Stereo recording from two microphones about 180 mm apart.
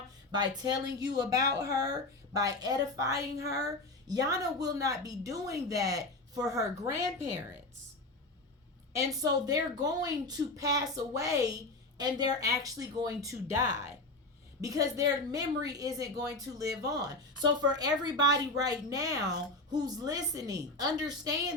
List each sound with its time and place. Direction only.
0.3 s a woman's voice: 25° right (ahead or behind)
0.9 s speech: 75° right (ahead or behind)
1.1 s a woman's voice: 20° right (ahead or behind)
8.9 s a woman's voice: 20° right (ahead or behind)